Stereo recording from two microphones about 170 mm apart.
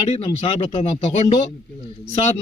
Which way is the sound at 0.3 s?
30° left (ahead or behind).